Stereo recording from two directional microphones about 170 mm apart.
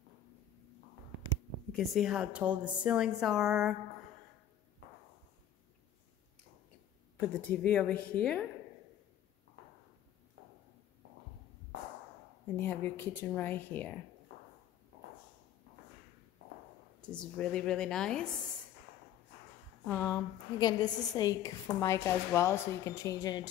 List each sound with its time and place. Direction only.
1.7 s a woman's voice: centre (ahead or behind)
7.2 s speech: 10° left (ahead or behind)
12.4 s speech: 10° left (ahead or behind)
17.0 s a woman's voice: 5° left (ahead or behind)
19.9 s a woman's voice: 15° left (ahead or behind)